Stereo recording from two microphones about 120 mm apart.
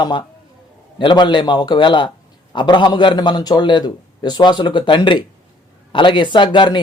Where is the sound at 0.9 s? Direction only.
40° left (ahead or behind).